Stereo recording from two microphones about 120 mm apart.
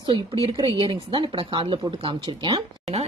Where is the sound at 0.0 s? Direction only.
40° right (ahead or behind).